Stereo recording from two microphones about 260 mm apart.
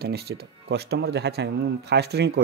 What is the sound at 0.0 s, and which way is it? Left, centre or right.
Speech, right.